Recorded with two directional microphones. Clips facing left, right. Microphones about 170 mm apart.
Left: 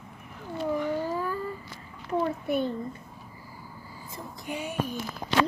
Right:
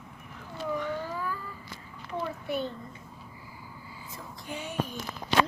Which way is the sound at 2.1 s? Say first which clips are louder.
Left 6 dB; 50° left (ahead or behind).